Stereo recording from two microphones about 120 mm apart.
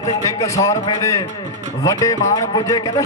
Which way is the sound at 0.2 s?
25° left (ahead or behind).